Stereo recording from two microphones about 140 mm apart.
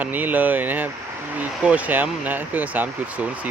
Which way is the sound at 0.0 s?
10° right (ahead or behind).